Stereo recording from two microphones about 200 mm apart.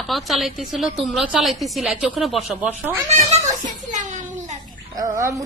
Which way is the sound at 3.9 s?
40° right (ahead or behind).